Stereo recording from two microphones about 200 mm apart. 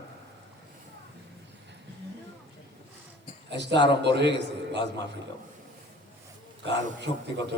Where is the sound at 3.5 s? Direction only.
60° right (ahead or behind).